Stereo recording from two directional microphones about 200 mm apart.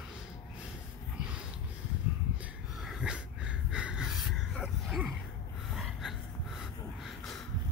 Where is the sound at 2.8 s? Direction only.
5° right (ahead or behind).